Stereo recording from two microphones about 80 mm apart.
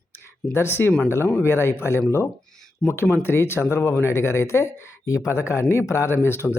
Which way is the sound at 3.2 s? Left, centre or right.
Left.